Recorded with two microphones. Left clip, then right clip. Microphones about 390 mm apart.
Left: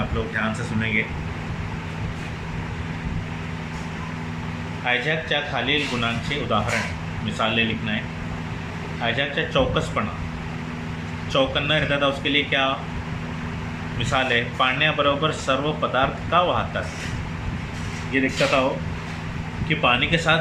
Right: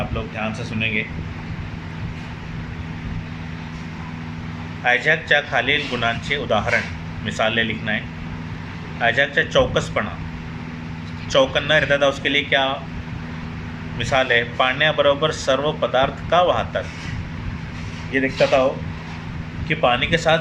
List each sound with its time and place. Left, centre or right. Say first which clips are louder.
0.3 s a man's voice: even; centre
4.9 s a man's voice: right 6 dB; centre
9.0 s a man's voice: right 6 dB; centre
11.3 s a man's voice: right 4 dB; centre
14.1 s a man's voice: right 4 dB; centre
18.1 s a man's voice: right 3 dB; centre
19.6 s a man's voice: right 2 dB; centre